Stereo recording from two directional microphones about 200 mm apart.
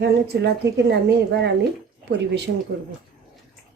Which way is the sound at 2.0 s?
55° right (ahead or behind).